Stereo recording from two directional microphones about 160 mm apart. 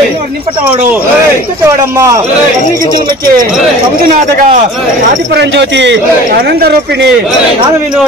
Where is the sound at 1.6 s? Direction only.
15° right (ahead or behind).